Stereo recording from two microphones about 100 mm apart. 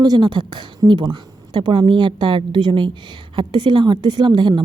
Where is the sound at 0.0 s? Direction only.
45° right (ahead or behind).